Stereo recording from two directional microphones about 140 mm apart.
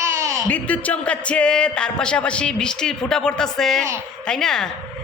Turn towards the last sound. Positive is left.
turn(degrees=5)  # may be behind; listen again after turning